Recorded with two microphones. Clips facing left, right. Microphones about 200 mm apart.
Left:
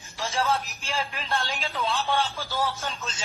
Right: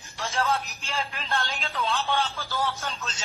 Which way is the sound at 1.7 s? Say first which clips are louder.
Even; centre (ahead or behind).